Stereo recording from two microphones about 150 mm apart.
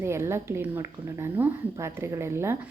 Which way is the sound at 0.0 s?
15° right (ahead or behind).